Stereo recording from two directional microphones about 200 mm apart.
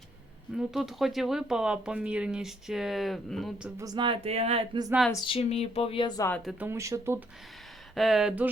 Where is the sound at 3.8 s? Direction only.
20° right (ahead or behind).